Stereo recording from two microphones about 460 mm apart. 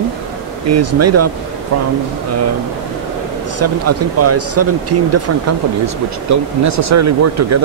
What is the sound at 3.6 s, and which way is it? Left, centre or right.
Speech, right.